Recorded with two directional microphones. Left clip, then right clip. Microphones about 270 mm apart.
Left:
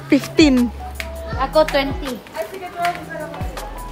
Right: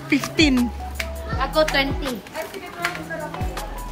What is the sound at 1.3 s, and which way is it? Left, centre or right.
Speech, left.